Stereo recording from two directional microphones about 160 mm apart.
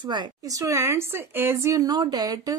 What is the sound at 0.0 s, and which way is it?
Speech, 30° right (ahead or behind).